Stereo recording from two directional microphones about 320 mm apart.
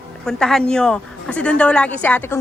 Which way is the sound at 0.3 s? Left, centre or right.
Centre.